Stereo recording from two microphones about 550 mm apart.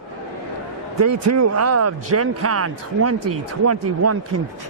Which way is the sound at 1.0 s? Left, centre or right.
Right.